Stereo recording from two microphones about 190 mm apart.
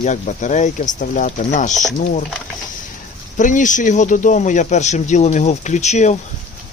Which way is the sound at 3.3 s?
40° left (ahead or behind).